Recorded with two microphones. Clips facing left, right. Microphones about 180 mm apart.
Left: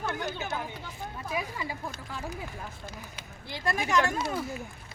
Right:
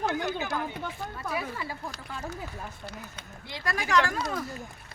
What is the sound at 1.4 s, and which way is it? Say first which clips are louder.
Speech: even; 15° left (ahead or behind).